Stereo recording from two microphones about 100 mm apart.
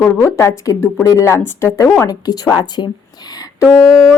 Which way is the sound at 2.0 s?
40° left (ahead or behind).